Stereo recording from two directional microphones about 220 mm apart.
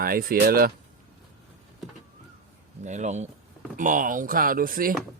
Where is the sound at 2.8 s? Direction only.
30° right (ahead or behind).